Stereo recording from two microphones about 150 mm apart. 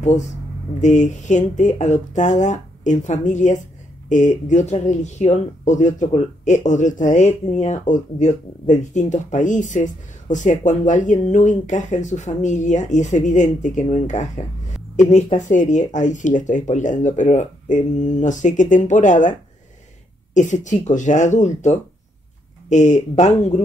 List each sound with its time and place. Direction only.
0.7 s speech: 55° left (ahead or behind)
20.3 s speech: 55° left (ahead or behind)